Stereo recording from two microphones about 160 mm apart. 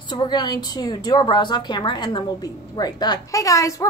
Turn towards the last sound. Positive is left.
turn(degrees=20)  # may be behind; listen again after turning